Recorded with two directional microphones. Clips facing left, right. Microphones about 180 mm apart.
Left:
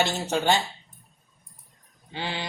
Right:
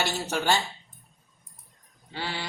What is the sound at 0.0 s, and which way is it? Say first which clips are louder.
Speech: left 3 dB; 20° left (ahead or behind).